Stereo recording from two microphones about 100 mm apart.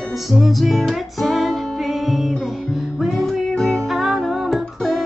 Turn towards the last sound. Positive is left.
turn(degrees=0)  # may be behind; listen again after turning